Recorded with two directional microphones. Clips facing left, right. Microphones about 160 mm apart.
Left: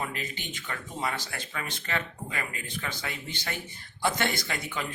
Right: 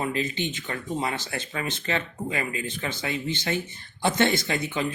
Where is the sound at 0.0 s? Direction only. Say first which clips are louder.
Right 8 dB; 25° right (ahead or behind).